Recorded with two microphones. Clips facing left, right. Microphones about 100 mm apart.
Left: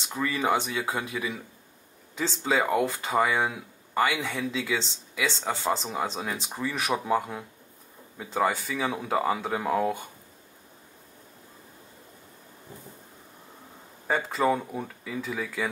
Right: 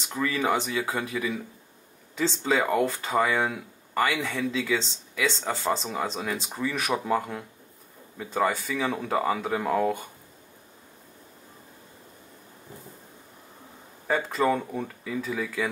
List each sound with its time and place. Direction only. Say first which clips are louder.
0.1 s speech: even; 15° left (ahead or behind)
14.0 s speech: right 1 dB; 5° left (ahead or behind)